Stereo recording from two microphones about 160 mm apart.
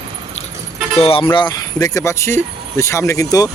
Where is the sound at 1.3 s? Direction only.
25° left (ahead or behind).